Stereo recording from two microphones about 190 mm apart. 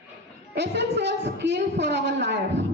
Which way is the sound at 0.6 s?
65° right (ahead or behind).